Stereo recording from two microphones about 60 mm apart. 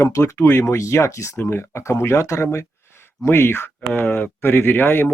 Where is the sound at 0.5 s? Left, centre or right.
Left.